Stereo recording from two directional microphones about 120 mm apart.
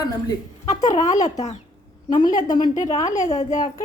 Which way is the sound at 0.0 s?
30° left (ahead or behind).